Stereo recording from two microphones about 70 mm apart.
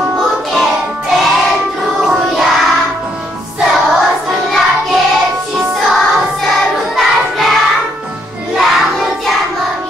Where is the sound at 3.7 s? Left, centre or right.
Centre.